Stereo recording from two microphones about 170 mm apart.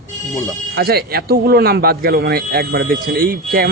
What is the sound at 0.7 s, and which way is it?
A man's voice, 65° right (ahead or behind).